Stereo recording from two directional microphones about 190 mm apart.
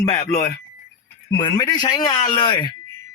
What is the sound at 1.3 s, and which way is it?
Speech, 20° left (ahead or behind).